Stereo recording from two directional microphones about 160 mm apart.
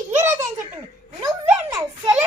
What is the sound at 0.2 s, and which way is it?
Giggle, 15° right (ahead or behind).